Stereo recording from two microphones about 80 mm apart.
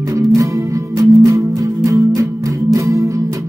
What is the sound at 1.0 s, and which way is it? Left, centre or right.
Music, right.